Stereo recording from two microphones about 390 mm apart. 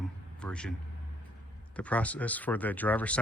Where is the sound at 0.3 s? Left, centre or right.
Centre.